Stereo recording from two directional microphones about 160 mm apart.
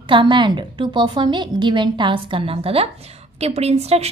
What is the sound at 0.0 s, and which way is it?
A woman's voice, 30° right (ahead or behind).